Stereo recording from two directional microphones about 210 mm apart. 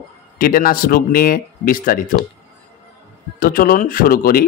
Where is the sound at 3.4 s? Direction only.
40° left (ahead or behind).